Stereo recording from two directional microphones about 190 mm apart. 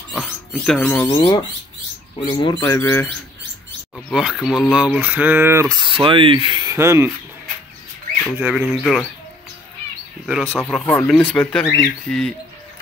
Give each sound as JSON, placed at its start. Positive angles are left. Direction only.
{"t": 0.1, "sound": "rodents", "side_deg": 0}
{"t": 1.0, "sound": "speech", "side_deg": 20}
{"t": 2.6, "sound": "speech", "side_deg": 10}
{"t": 3.9, "sound": "speech", "side_deg": 0}
{"t": 8.3, "sound": "speech", "side_deg": -5}
{"t": 8.5, "sound": "speech", "side_deg": 5}
{"t": 10.2, "sound": "speech", "side_deg": 0}